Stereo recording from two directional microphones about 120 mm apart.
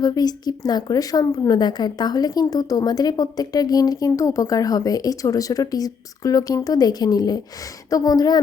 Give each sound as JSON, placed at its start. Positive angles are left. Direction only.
{"t": 0.0, "sound": "a woman's voice", "side_deg": 35}